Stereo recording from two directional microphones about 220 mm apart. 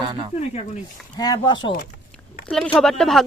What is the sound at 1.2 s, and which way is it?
Speech, 20° left (ahead or behind).